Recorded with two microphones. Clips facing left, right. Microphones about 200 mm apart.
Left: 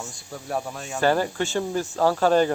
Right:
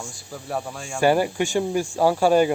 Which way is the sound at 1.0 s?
15° right (ahead or behind).